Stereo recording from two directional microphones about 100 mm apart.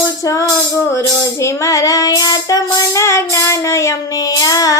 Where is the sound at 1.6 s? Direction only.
35° left (ahead or behind).